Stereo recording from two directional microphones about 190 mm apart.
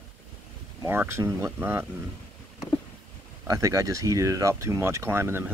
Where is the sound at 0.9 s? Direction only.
10° right (ahead or behind).